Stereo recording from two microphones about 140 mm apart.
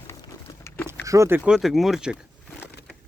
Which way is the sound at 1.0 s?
20° right (ahead or behind).